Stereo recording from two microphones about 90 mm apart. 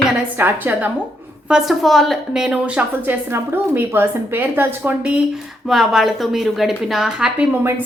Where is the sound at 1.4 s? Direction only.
5° right (ahead or behind).